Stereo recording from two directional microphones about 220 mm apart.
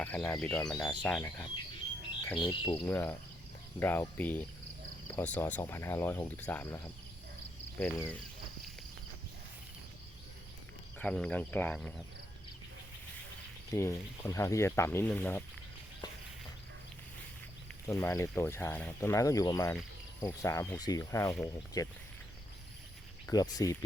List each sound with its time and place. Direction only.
0.0 s speech: 5° left (ahead or behind)
2.4 s cricket: 20° left (ahead or behind)
2.8 s speech: 10° left (ahead or behind)
10.9 s speech: 5° left (ahead or behind)
13.7 s speech: 10° left (ahead or behind)
17.7 s speech: 10° left (ahead or behind)
23.2 s speech: 15° left (ahead or behind)